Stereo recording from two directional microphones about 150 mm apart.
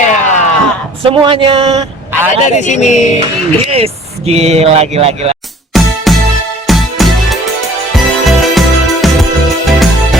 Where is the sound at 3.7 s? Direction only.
45° right (ahead or behind).